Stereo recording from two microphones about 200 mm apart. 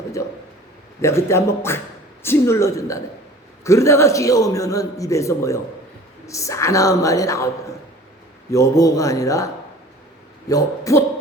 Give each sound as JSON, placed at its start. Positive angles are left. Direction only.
{"t": 0.2, "sound": "a man's voice", "side_deg": 15}
{"t": 10.5, "sound": "a man's voice", "side_deg": 15}